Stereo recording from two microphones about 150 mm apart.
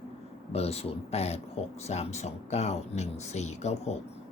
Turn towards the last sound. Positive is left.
turn(degrees=45)  # may be behind; listen again after turning